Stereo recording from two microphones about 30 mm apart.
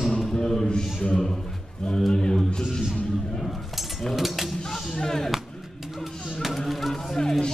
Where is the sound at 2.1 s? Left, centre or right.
Left.